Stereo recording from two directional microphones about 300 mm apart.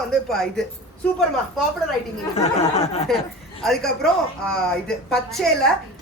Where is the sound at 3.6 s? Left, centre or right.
Centre.